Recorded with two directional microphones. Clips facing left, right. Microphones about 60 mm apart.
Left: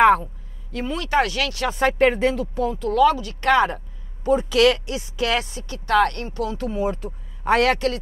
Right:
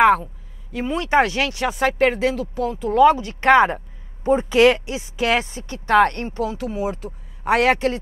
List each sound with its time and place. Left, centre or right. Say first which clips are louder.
0.0 s a sound: even; centre
0.8 s speech: right 3 dB; right
1.8 s speech: left 1 dB; centre
2.8 s speech: right 4 dB; right
6.7 s speech: left 1 dB; centre